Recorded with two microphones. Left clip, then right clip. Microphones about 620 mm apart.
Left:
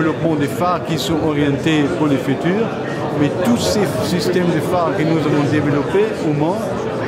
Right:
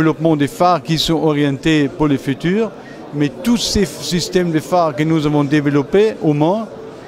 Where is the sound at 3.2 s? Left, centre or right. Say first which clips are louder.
Even; right.